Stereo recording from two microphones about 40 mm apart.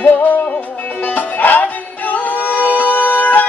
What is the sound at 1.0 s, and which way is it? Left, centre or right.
Music, left.